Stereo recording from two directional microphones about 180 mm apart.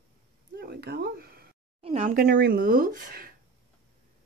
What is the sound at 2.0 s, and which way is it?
Speech, 50° right (ahead or behind).